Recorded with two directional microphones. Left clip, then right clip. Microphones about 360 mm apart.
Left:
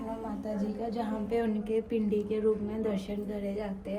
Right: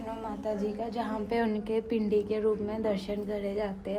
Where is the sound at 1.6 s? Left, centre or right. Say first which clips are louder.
Even; right.